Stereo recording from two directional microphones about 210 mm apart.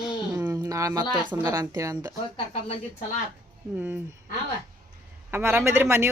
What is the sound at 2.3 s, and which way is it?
Speech, 25° left (ahead or behind).